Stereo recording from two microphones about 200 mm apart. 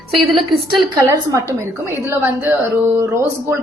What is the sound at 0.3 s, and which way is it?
Speech, centre (ahead or behind).